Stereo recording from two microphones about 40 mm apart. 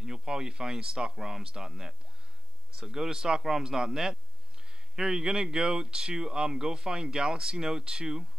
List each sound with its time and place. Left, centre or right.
0.0 s a man's voice: centre